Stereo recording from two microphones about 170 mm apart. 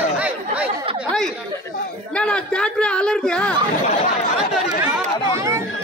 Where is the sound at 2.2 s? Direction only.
5° left (ahead or behind).